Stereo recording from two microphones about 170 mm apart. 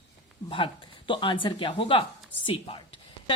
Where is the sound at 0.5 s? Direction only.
30° left (ahead or behind).